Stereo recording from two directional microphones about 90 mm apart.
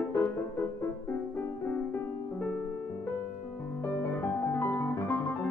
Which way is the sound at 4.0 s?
25° left (ahead or behind).